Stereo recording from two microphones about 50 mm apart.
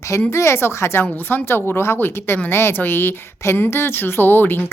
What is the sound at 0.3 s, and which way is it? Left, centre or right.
Speech, left.